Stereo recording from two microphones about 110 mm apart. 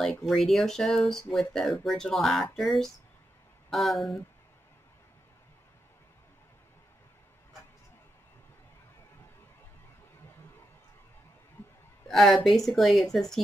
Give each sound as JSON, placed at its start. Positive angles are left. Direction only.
{"t": 0.0, "sound": "speech", "side_deg": 0}
{"t": 12.1, "sound": "a woman's voice", "side_deg": 0}